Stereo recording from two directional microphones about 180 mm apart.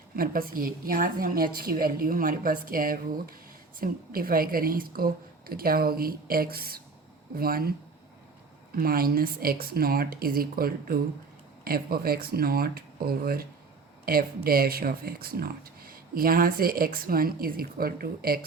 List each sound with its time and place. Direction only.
0.2 s a woman's voice: 55° right (ahead or behind)
8.7 s speech: 55° right (ahead or behind)